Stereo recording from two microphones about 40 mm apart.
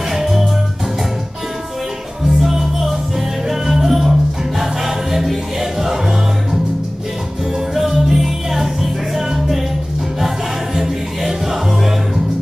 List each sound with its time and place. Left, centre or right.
0.1 s music: centre
2.4 s music: centre
7.7 s music: centre